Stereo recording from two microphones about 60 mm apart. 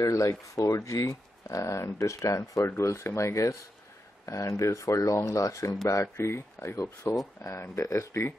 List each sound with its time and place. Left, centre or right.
0.0 s speech: left